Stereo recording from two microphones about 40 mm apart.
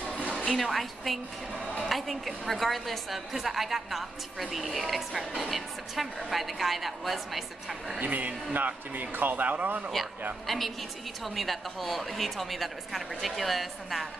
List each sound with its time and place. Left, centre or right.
0.2 s music: right
0.5 s a woman's voice: centre
8.0 s speech: right
10.4 s a woman's voice: centre